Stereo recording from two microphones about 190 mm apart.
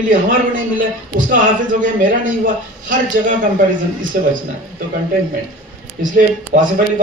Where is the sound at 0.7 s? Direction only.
45° right (ahead or behind).